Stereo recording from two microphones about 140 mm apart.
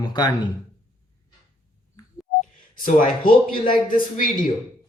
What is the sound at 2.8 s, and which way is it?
Speech, 75° left (ahead or behind).